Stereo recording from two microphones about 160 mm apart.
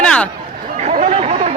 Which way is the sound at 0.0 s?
5° left (ahead or behind).